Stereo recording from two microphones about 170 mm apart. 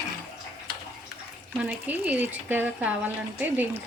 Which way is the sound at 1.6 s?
10° right (ahead or behind).